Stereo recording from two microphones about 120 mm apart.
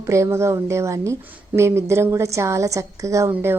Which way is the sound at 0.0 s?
25° right (ahead or behind).